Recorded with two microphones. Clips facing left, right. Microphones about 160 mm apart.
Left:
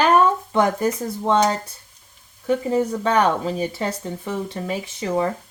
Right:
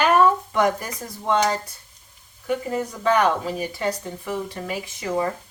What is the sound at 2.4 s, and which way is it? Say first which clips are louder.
Speech: left 5 dB; 30° left (ahead or behind).